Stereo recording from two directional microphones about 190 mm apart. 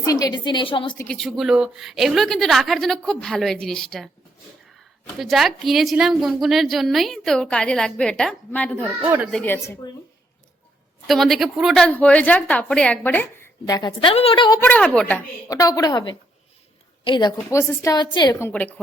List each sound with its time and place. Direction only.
0.0 s a woman's voice: 20° left (ahead or behind)
0.9 s a woman's voice: 5° left (ahead or behind)
9.0 s speech: 10° right (ahead or behind)
9.3 s a woman's voice: 10° left (ahead or behind)
9.8 s a woman's voice: 20° left (ahead or behind)
11.0 s a woman's voice: centre (ahead or behind); by 14.6 s 25° left (ahead or behind)
14.6 s a woman's voice: 5° left (ahead or behind)
15.4 s a woman's voice: 20° left (ahead or behind)